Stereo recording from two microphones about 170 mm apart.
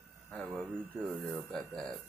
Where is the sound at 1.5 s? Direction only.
5° left (ahead or behind).